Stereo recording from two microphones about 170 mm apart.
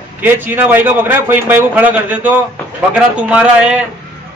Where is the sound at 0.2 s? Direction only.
10° right (ahead or behind).